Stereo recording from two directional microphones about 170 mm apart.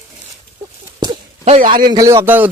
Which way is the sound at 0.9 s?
25° right (ahead or behind).